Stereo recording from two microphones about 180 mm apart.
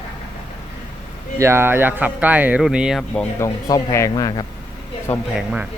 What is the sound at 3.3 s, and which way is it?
Speech, 20° left (ahead or behind).